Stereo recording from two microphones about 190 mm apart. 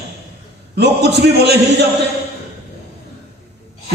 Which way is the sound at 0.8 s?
60° right (ahead or behind).